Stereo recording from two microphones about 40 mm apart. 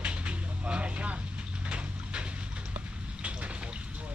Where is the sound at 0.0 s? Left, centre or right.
Right.